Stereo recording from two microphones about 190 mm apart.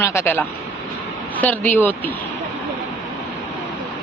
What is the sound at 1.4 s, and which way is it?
Speech, 10° left (ahead or behind).